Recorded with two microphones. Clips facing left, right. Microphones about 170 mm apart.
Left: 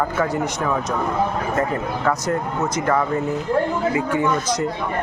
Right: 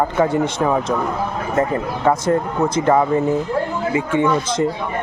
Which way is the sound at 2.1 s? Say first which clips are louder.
Right 6 dB; 25° right (ahead or behind).